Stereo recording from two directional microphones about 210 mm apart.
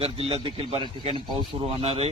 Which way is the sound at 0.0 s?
25° right (ahead or behind).